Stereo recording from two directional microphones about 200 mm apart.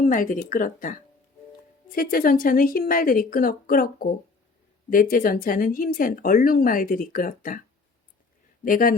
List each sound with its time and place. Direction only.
0.0 s speech: 45° left (ahead or behind)
8.6 s speech: 45° left (ahead or behind)